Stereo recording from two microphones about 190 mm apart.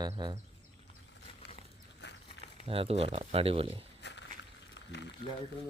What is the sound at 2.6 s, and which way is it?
A man's voice, 30° right (ahead or behind).